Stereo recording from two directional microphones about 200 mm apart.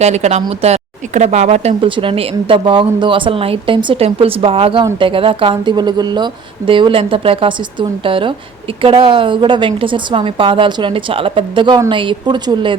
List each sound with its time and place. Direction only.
0.0 s speech: 35° right (ahead or behind)